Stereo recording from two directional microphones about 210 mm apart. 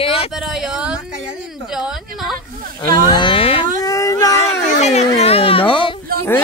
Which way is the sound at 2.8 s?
15° left (ahead or behind).